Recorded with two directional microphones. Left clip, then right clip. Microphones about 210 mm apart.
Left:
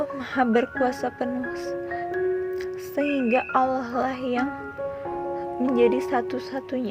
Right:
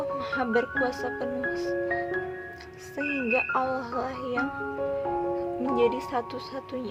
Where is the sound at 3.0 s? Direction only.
25° left (ahead or behind).